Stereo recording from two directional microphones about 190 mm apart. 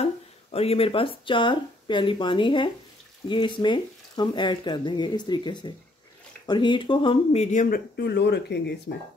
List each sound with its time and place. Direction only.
0.0 s speech: 30° left (ahead or behind)
7.5 s speech: 55° left (ahead or behind)